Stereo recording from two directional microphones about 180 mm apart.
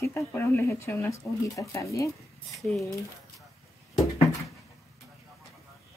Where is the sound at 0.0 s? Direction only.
10° left (ahead or behind).